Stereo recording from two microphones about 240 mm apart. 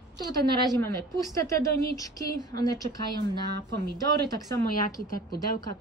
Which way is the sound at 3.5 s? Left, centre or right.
Right.